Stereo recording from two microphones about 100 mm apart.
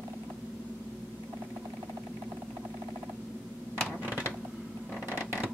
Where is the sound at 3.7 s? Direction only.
15° right (ahead or behind).